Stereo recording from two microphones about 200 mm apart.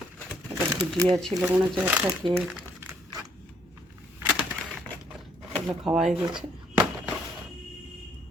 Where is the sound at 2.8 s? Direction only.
20° right (ahead or behind).